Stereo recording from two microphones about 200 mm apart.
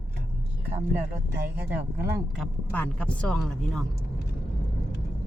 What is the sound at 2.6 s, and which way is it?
Speech, 10° left (ahead or behind).